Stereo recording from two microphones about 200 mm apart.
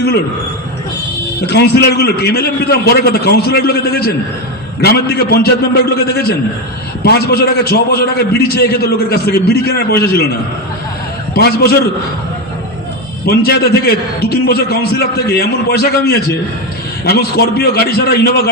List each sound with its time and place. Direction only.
1.5 s a man's voice: 55° left (ahead or behind)
11.3 s a man's voice: 50° left (ahead or behind)
13.2 s a man's voice: 50° left (ahead or behind)